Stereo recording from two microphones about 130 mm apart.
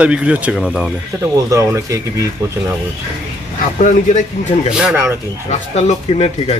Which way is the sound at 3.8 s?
70° left (ahead or behind).